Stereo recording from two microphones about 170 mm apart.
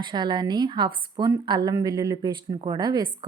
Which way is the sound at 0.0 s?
25° right (ahead or behind).